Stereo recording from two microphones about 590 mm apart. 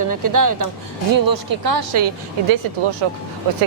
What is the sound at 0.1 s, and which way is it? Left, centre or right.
Speech, right.